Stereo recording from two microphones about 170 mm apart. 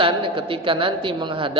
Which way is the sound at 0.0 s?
30° right (ahead or behind).